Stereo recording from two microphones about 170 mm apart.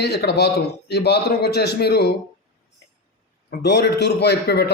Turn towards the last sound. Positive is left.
turn(degrees=75)  # may be behind; listen again after turning